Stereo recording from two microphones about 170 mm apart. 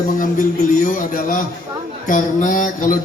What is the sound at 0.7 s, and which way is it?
Speech, 50° left (ahead or behind).